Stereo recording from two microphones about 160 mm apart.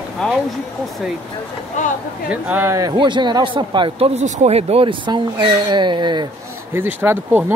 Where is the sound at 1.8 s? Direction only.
50° left (ahead or behind).